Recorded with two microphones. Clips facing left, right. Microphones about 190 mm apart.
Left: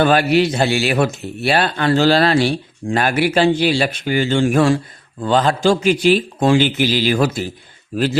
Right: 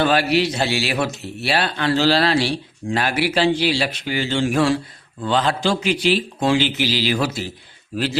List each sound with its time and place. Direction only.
0.0 s a man's voice: 50° left (ahead or behind)